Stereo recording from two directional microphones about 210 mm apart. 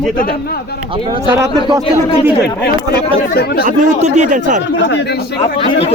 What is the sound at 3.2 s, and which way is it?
Speech, 50° left (ahead or behind).